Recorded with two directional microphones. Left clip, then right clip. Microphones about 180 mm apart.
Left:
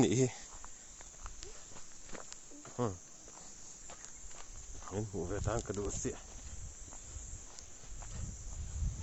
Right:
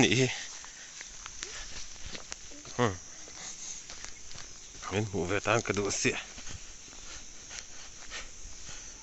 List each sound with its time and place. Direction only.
0.0 s speech: 15° left (ahead or behind)
2.8 s speech: 10° right (ahead or behind)
5.1 s speech: 20° right (ahead or behind)